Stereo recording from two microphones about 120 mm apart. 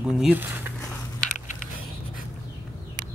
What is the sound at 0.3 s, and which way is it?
Speech, 15° right (ahead or behind).